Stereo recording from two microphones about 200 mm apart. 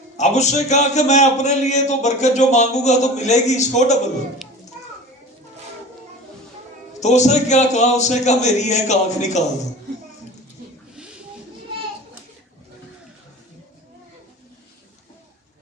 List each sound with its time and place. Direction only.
0.2 s a man's voice: 35° left (ahead or behind)
7.0 s a man's voice: 35° left (ahead or behind)